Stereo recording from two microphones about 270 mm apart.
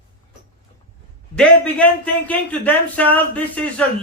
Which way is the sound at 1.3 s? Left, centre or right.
Centre.